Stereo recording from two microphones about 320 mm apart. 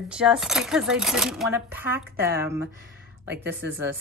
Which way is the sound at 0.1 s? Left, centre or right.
Centre.